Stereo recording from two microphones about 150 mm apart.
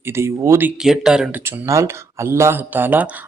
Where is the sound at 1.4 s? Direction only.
20° right (ahead or behind).